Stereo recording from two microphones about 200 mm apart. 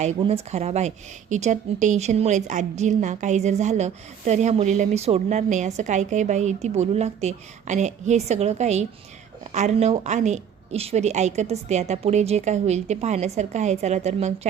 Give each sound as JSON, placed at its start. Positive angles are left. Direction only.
{"t": 0.0, "sound": "speech", "side_deg": -30}